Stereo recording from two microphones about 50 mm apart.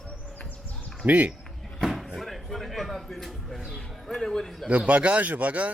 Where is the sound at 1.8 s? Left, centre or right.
Centre.